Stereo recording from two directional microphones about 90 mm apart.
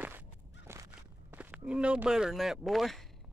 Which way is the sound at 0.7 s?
30° right (ahead or behind).